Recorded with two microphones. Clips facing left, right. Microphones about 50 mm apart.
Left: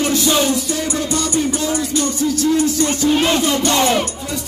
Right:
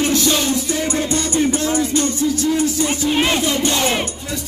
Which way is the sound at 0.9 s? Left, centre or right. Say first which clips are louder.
Left 1 dB; right.